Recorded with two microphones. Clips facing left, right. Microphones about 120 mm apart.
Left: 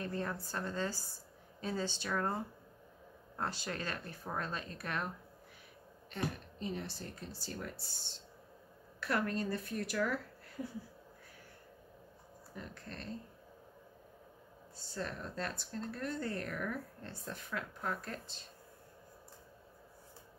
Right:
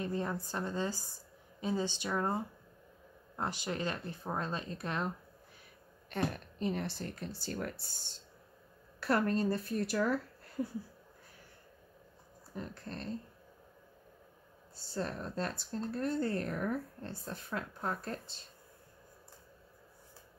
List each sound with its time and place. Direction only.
0.0 s a woman's voice: 20° right (ahead or behind)
6.0 s speech: 65° right (ahead or behind)
9.0 s speech: 35° right (ahead or behind)
12.5 s speech: 35° right (ahead or behind)
14.9 s speech: 30° right (ahead or behind)